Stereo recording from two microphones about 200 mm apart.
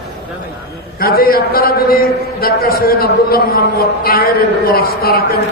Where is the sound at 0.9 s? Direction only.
50° left (ahead or behind).